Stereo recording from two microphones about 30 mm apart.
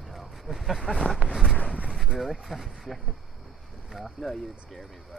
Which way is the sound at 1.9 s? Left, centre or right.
Centre.